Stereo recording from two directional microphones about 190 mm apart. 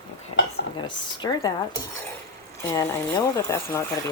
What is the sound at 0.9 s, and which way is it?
Speech, 20° left (ahead or behind).